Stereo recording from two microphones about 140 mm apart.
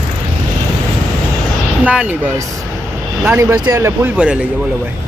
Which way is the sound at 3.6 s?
20° right (ahead or behind).